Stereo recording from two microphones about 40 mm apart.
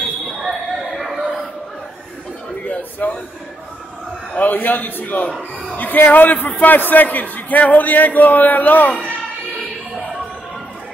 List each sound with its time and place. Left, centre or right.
0.4 s basketball bounce: centre
2.6 s a sound: left
4.4 s a man's voice: left